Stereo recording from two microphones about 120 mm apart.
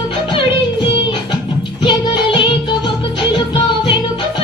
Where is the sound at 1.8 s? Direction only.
40° left (ahead or behind).